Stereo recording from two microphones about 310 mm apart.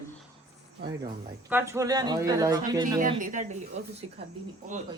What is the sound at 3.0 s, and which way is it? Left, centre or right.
Speech, right.